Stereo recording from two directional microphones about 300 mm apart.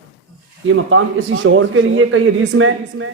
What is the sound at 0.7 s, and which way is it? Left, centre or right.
A man's voice, right.